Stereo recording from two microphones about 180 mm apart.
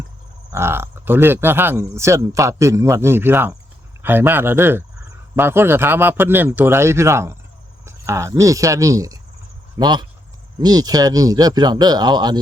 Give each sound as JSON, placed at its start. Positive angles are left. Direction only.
{"t": 0.5, "sound": "speech", "side_deg": -15}